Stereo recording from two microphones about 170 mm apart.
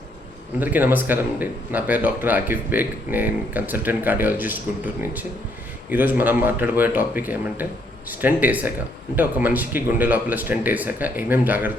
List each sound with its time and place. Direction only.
0.6 s speech: 10° right (ahead or behind)
5.9 s speech: 10° right (ahead or behind)